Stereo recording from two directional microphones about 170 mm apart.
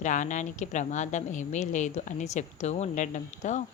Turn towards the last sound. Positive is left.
turn(degrees=45)  # may be behind; listen again after turning